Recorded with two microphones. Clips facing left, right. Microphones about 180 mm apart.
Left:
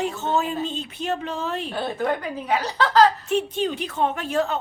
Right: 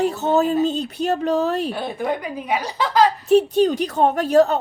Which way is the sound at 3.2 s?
35° right (ahead or behind).